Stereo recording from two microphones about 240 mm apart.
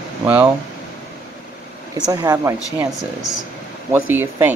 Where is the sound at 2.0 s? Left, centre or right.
Centre.